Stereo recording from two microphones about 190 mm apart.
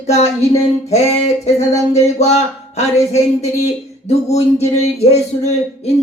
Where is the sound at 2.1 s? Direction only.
35° left (ahead or behind).